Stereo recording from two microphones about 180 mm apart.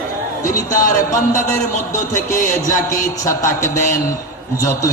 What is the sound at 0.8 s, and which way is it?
Music, 45° left (ahead or behind).